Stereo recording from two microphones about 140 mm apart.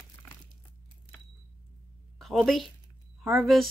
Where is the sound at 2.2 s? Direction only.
Centre (ahead or behind).